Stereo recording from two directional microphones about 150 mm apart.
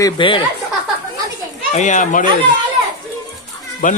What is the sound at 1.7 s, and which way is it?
Speech, 55° left (ahead or behind).